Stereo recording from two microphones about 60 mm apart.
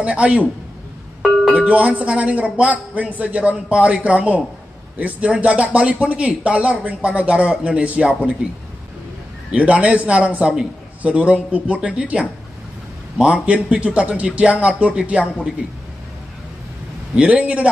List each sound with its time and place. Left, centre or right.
0.0 s speech: right
1.5 s speech: right
9.5 s speech: right
13.3 s speech: right
17.1 s speech: right